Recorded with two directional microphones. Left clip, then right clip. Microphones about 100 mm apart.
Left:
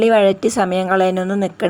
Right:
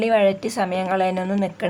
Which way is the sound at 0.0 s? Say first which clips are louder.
Left 5 dB; 50° left (ahead or behind).